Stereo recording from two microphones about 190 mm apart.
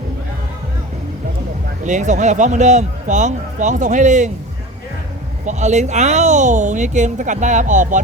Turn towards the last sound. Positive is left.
turn(degrees=-40)  # may be behind; listen again after turning